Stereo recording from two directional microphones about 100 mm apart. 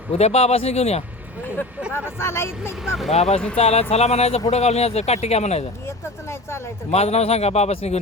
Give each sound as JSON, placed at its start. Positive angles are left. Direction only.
{"t": 0.1, "sound": "speech", "side_deg": 90}
{"t": 1.9, "sound": "speech", "side_deg": 25}
{"t": 2.8, "sound": "speech", "side_deg": -5}
{"t": 3.1, "sound": "speech", "side_deg": 90}
{"t": 6.9, "sound": "speech", "side_deg": 90}